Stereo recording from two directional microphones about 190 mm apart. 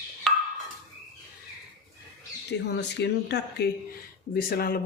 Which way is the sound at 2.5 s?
65° left (ahead or behind).